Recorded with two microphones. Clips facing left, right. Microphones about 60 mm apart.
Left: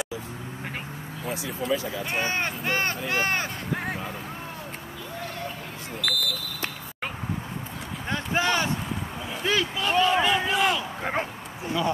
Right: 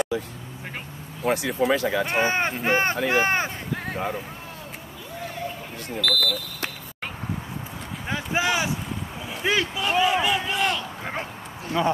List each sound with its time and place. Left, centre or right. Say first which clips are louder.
1.2 s speech: right 9 dB; right
2.1 s speech: right 5 dB; right
3.7 s vehicle: left 2 dB; centre
6.0 s speech: right 4 dB; centre
8.1 s speech: right 1 dB; centre
11.0 s a sound: left 3 dB; left